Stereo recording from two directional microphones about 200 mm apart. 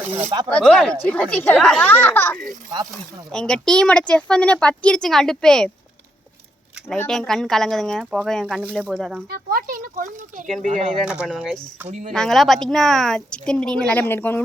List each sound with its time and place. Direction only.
0.2 s speech: 15° right (ahead or behind)
0.4 s speech: 5° left (ahead or behind)
7.0 s speech: centre (ahead or behind)
9.3 s speech: 45° right (ahead or behind)
10.9 s speech: 5° right (ahead or behind)
11.9 s speech: 35° right (ahead or behind)
12.1 s speech: centre (ahead or behind)